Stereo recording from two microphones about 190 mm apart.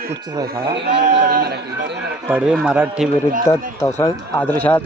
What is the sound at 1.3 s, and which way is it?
Speech, 55° right (ahead or behind).